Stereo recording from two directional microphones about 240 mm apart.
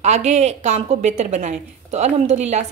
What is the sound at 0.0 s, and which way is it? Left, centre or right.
A woman's voice, right.